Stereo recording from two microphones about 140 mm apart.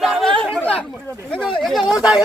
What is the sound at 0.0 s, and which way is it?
Chatter, centre (ahead or behind).